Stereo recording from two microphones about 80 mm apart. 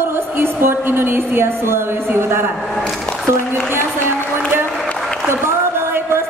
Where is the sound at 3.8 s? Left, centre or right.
Right.